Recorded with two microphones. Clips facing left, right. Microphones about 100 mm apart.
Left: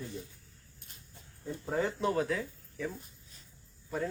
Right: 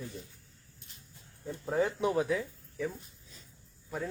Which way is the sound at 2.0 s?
15° right (ahead or behind).